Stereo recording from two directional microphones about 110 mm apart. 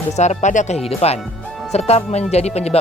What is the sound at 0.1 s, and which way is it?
Speech, 90° left.